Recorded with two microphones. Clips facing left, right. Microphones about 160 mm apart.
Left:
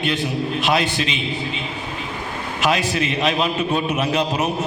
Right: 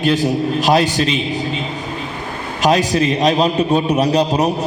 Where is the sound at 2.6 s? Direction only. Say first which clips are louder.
Right 6 dB; 40° right (ahead or behind).